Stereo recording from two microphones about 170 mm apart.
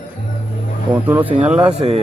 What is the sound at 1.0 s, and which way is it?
Speech, 10° right (ahead or behind).